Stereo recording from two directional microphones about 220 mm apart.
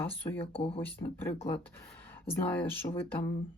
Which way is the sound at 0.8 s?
10° left (ahead or behind).